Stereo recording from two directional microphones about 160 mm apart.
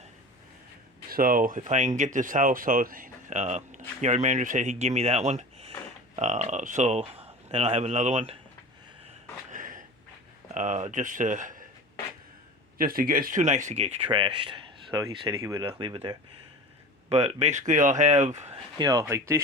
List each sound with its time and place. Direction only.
1.1 s speech: 60° right (ahead or behind); by 8.4 s 40° right (ahead or behind)
9.5 s a sound: 55° right (ahead or behind)
10.5 s speech: 50° right (ahead or behind)
12.8 s speech: 65° right (ahead or behind); by 15.7 s 20° right (ahead or behind)
15.8 s speech: 30° right (ahead or behind)
18.8 s speech: 20° right (ahead or behind)